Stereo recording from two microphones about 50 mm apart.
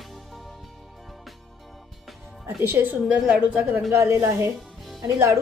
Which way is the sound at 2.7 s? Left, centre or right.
Right.